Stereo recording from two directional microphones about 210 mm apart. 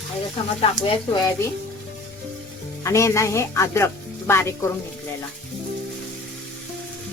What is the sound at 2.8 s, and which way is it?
Speech, 15° left (ahead or behind).